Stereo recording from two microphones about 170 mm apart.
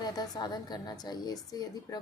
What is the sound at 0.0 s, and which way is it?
A woman's voice, 25° left (ahead or behind).